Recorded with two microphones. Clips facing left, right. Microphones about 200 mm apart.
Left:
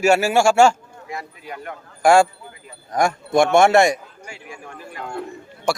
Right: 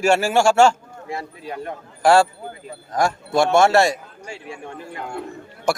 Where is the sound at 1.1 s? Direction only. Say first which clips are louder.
Right 3 dB; 30° right (ahead or behind).